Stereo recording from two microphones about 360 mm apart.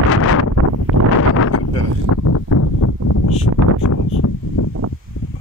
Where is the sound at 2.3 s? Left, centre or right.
Left.